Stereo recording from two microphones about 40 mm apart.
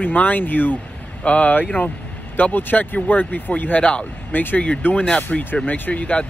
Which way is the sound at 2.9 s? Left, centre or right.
Left.